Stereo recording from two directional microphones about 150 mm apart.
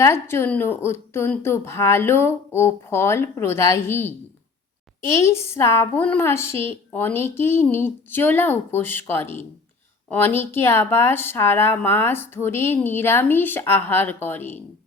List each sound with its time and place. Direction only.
0.0 s a woman's voice: 15° left (ahead or behind)
5.1 s a woman's voice: 20° left (ahead or behind)